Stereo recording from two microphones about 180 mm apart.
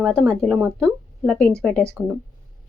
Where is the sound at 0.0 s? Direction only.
Centre (ahead or behind).